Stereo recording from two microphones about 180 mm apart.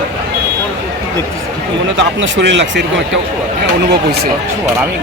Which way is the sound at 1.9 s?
80° right.